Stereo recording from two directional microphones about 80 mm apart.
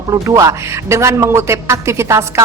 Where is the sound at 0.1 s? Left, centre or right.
Right.